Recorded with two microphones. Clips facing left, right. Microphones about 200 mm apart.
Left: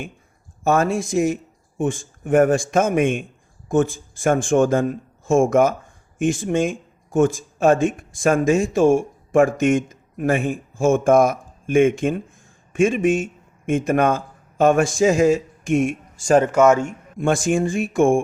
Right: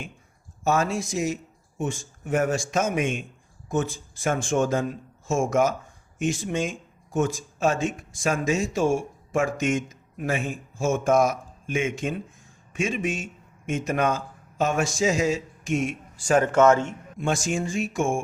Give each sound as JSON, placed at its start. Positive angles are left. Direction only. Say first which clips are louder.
{"t": 0.6, "sound": "a man's voice", "louder": "left 5 dB", "side_deg": 55}
{"t": 16.6, "sound": "a man's voice", "louder": "left 3 dB", "side_deg": 15}
{"t": 17.2, "sound": "speech", "louder": "left 7 dB", "side_deg": 55}